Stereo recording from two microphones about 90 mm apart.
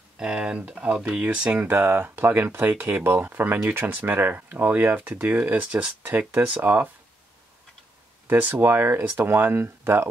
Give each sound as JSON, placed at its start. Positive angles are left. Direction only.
{"t": 0.2, "sound": "speech", "side_deg": -10}
{"t": 8.3, "sound": "speech", "side_deg": -20}